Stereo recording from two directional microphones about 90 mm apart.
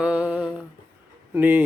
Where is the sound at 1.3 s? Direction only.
20° right (ahead or behind).